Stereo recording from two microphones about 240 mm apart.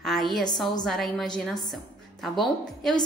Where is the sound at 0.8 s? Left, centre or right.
Centre.